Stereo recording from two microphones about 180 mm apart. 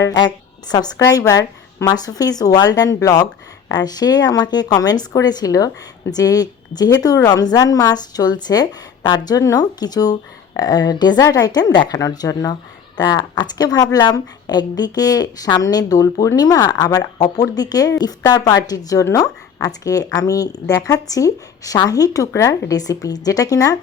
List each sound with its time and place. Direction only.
0.0 s speech: 25° left (ahead or behind)